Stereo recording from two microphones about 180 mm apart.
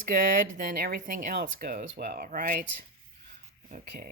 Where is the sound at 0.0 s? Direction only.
45° right (ahead or behind).